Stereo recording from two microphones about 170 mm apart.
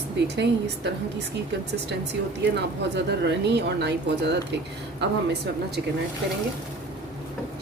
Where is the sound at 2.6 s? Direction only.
90° right.